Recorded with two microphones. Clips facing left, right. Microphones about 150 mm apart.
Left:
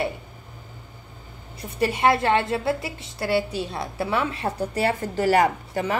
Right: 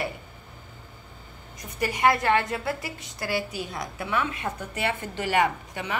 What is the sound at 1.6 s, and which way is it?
A woman's voice, 30° left (ahead or behind).